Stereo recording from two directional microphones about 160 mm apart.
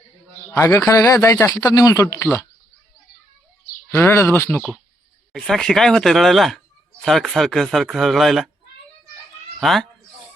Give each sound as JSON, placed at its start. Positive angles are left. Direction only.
{"t": 0.5, "sound": "speech", "side_deg": 15}
{"t": 3.9, "sound": "speech", "side_deg": 15}
{"t": 5.3, "sound": "a man's voice", "side_deg": 5}
{"t": 9.6, "sound": "a man's voice", "side_deg": 0}